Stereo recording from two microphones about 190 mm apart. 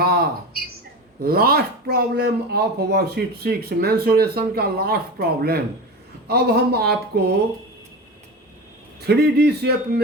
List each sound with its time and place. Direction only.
0.0 s a sound: 55° right (ahead or behind)
1.2 s speech: 50° right (ahead or behind)
9.0 s speech: 60° right (ahead or behind)